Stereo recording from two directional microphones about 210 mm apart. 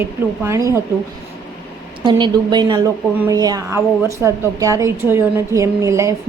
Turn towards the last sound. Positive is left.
turn(degrees=-15)  # may be behind; listen again after turning